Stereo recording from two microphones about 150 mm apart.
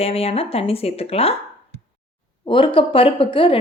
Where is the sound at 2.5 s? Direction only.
35° left (ahead or behind).